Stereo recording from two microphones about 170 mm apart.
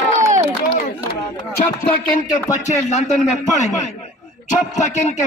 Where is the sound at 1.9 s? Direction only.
55° left (ahead or behind).